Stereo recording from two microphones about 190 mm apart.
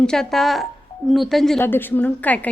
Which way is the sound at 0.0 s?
5° left (ahead or behind).